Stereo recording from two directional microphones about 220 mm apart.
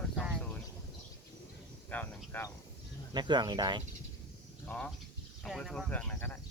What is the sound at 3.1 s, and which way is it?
Speech, 20° right (ahead or behind).